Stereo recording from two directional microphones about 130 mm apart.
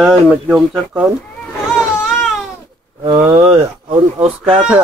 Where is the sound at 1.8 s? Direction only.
5° right (ahead or behind).